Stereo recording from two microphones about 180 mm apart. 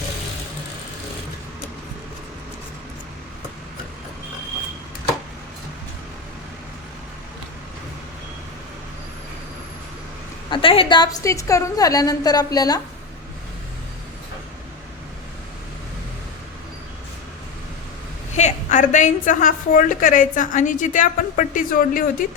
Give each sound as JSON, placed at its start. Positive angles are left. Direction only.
{"t": 10.5, "sound": "a woman's voice", "side_deg": 30}
{"t": 18.3, "sound": "a woman's voice", "side_deg": 40}